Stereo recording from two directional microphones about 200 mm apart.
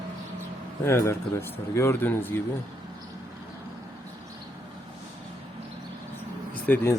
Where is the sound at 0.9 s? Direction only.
15° left (ahead or behind).